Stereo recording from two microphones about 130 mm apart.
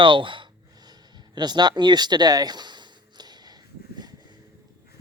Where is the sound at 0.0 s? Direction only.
40° right (ahead or behind).